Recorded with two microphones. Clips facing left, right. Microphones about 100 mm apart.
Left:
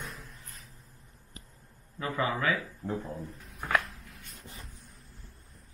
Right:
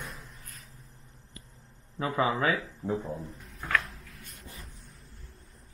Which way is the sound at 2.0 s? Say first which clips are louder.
Right 3 dB; 25° right (ahead or behind).